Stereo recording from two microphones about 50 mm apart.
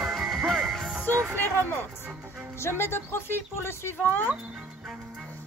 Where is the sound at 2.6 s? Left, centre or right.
Left.